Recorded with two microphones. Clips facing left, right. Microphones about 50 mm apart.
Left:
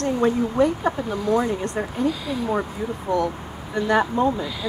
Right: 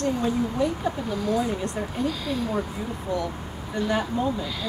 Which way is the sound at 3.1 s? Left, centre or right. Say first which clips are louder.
Left 6 dB; left.